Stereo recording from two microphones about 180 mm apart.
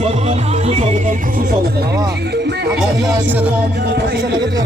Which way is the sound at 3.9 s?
65° right (ahead or behind).